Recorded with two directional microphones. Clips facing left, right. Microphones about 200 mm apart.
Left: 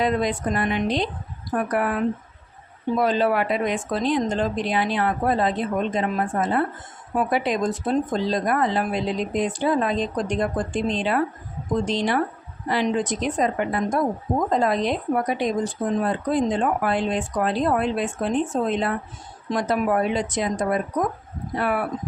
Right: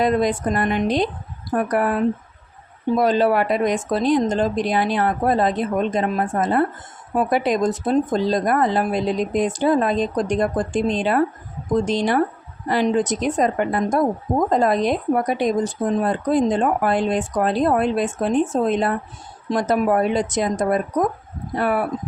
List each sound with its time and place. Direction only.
0.0 s speech: 45° right (ahead or behind)